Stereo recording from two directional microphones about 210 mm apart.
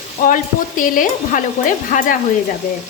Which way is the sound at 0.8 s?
40° left (ahead or behind).